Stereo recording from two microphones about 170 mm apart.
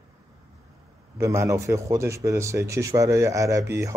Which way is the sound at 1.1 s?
15° right (ahead or behind).